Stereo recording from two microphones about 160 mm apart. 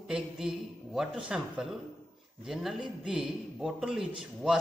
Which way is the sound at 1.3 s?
5° right (ahead or behind).